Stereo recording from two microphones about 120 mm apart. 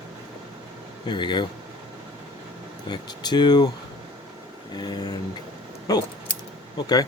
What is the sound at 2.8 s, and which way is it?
Speech, 35° left (ahead or behind).